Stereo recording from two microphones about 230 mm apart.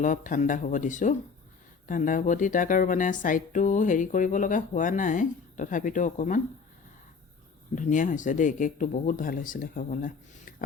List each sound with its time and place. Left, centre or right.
0.0 s speech: left
7.8 s speech: left